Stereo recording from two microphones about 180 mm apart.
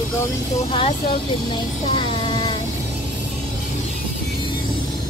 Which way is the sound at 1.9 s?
25° left (ahead or behind).